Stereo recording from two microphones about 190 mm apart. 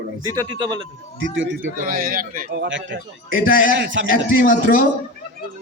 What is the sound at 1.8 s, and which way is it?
A man's voice, 45° right (ahead or behind).